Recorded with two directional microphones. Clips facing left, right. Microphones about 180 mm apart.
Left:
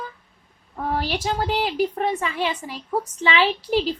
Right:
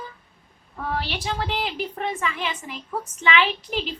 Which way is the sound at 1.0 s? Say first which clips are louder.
Left 5 dB; 45° left (ahead or behind).